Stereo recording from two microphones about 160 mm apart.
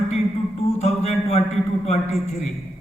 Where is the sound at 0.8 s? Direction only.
40° left (ahead or behind).